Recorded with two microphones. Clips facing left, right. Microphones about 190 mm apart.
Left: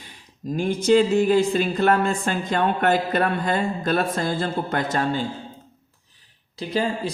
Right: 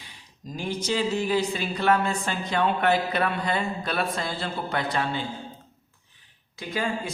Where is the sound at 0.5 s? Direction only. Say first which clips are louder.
Left 10 dB; 55° left (ahead or behind).